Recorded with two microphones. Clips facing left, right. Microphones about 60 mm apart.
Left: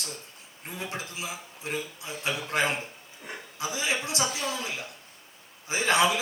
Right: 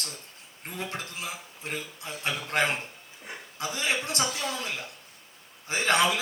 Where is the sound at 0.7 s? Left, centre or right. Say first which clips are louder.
Even; right.